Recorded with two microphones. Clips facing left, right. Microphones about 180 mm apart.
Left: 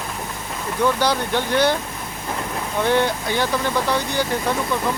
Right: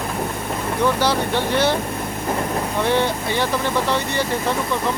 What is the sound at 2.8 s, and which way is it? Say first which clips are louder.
Speech: left 2 dB; centre (ahead or behind).